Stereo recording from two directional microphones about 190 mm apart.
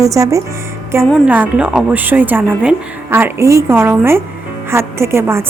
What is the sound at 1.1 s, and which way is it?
Speech, 5° right (ahead or behind).